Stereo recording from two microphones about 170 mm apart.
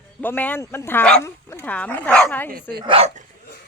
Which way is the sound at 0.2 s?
10° left (ahead or behind).